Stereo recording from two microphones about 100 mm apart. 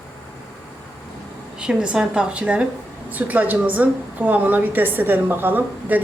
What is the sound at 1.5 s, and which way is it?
A woman's voice, 10° right (ahead or behind).